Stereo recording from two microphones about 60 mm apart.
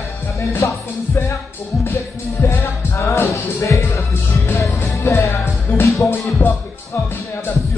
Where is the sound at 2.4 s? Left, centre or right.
Left.